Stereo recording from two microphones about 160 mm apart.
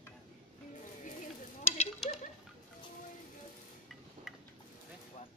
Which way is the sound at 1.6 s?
40° left (ahead or behind).